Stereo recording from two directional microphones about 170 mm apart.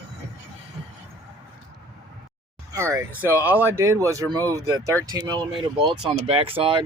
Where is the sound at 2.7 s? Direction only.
15° right (ahead or behind); by 6.8 s 30° right (ahead or behind).